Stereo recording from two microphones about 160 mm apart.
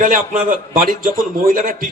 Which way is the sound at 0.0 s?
60° right (ahead or behind).